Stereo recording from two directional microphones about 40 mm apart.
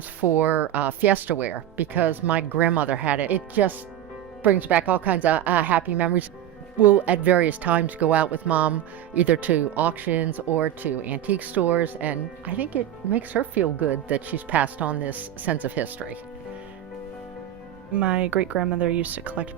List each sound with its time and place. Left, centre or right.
0.3 s speech: right
17.9 s speech: right